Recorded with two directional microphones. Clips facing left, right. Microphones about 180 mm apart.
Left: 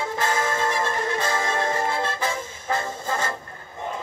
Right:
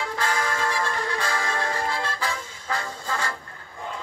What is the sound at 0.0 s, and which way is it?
Music, 20° left (ahead or behind).